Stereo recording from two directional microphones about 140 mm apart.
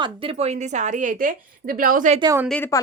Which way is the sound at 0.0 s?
40° right (ahead or behind).